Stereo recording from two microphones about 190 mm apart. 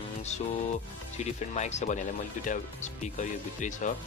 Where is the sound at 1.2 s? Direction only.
35° left (ahead or behind).